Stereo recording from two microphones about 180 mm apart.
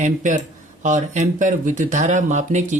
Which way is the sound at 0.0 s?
45° right (ahead or behind).